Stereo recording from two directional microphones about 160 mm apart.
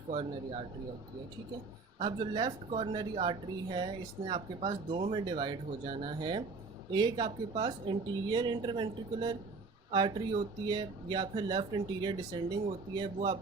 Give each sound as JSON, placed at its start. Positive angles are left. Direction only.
{"t": 2.0, "sound": "speech", "side_deg": -30}